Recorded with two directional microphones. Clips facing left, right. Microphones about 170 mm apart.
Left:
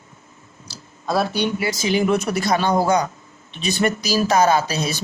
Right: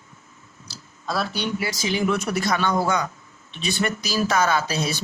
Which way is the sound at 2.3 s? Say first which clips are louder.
Left 3 dB; 35° left (ahead or behind).